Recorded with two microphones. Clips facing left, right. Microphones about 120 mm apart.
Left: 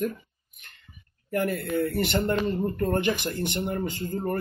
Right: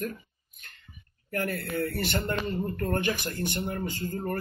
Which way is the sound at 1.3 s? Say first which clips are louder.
Left 4 dB; 15° left (ahead or behind).